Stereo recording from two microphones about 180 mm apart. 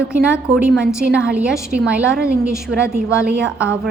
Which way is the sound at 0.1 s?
5° right (ahead or behind).